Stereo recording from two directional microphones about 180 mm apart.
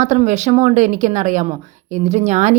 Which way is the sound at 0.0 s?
40° right (ahead or behind).